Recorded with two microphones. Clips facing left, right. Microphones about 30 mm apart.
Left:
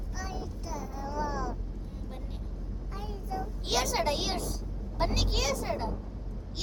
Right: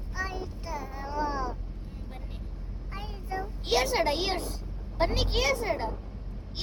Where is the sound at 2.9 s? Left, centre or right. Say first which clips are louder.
Right 1 dB; right.